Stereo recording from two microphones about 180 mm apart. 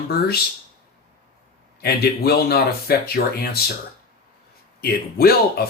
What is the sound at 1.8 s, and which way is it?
Speech, 60° left (ahead or behind).